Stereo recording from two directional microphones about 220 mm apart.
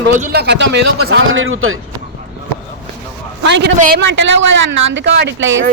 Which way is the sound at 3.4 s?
55° right (ahead or behind).